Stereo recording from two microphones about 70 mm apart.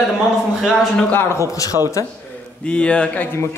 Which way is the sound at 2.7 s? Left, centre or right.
Centre.